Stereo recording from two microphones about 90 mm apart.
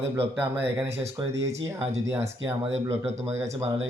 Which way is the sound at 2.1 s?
25° right (ahead or behind).